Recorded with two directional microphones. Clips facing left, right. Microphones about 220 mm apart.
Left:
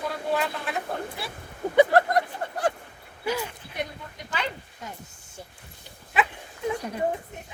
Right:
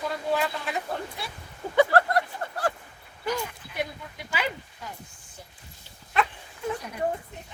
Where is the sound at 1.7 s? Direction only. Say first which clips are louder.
Left 2 dB; 20° left (ahead or behind).